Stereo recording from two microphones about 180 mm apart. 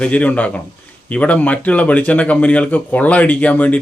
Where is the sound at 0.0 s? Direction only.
10° left (ahead or behind).